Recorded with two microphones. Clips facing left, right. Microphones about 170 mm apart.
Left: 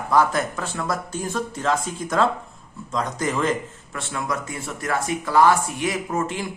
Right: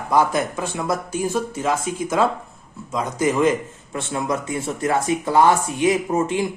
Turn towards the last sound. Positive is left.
turn(degrees=-20)  # may be behind; listen again after turning